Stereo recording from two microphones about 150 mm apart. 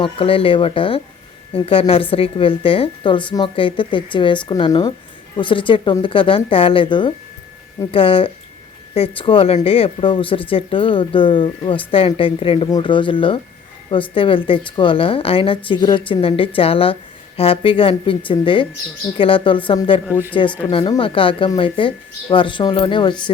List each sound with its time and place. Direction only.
0.0 s a woman's voice: 35° left (ahead or behind)